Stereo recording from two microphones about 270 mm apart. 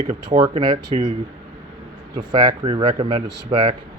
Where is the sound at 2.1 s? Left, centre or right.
Centre.